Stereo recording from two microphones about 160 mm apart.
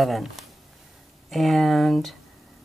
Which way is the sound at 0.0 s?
Centre (ahead or behind).